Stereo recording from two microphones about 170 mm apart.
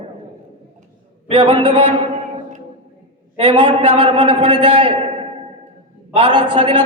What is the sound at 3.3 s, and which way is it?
A man's voice, 30° right (ahead or behind).